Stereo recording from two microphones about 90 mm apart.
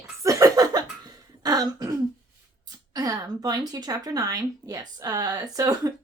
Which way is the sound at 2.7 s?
45° right (ahead or behind).